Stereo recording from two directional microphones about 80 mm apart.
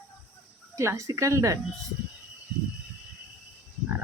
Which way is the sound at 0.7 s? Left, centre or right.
Right.